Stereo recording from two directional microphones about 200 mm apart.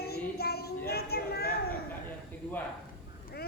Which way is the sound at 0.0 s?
50° left (ahead or behind).